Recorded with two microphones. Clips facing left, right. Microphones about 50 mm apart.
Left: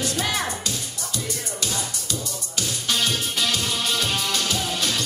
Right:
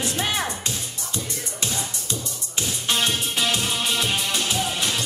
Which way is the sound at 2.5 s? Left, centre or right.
Right.